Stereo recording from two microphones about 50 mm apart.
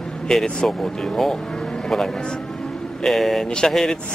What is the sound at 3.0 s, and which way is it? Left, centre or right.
Speech, centre.